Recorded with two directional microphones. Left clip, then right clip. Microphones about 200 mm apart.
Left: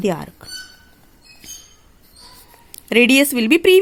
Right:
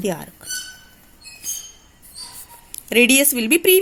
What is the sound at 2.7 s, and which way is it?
A woman's voice, 50° left (ahead or behind).